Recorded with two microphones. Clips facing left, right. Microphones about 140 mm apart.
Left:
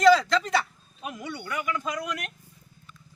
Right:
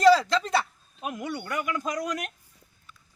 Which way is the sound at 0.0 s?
35° right (ahead or behind).